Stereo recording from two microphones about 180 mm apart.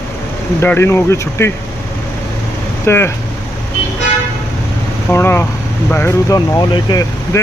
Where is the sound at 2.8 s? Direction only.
15° left (ahead or behind).